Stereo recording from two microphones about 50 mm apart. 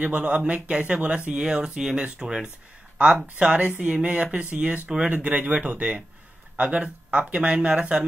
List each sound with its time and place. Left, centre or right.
0.0 s speech: right
4.6 s speech: centre
5.1 s speech: right